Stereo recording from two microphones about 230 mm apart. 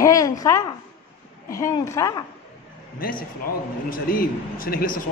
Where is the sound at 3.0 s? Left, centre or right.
Left.